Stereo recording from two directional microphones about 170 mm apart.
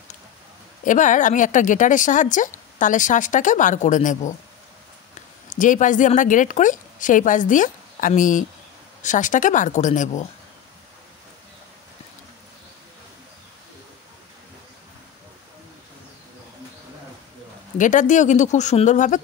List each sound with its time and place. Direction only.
0.8 s speech: 50° left (ahead or behind)
5.5 s speech: 50° left (ahead or behind)
17.7 s speech: 50° left (ahead or behind)